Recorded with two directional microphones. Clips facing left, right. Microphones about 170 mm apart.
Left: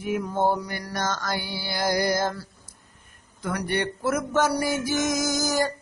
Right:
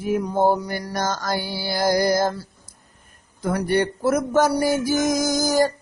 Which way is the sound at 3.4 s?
40° right (ahead or behind).